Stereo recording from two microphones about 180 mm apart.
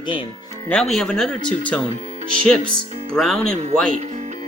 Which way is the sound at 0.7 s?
Centre (ahead or behind).